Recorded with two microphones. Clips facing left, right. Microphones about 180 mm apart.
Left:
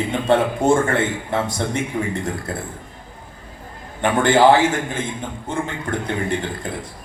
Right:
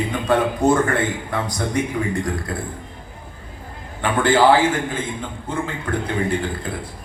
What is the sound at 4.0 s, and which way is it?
A man's voice, 25° left (ahead or behind).